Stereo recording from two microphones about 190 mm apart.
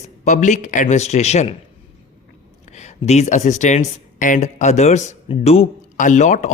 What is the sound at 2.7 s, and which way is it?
Speech, 35° left (ahead or behind).